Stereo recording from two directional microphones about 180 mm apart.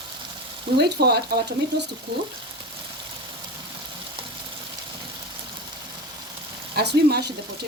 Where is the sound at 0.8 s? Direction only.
65° right (ahead or behind).